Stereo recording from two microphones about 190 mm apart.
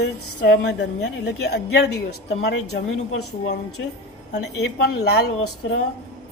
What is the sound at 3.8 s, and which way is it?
Speech, 70° left (ahead or behind).